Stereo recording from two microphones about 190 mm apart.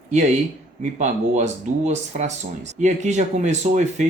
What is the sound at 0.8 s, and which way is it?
Speech, 40° right (ahead or behind).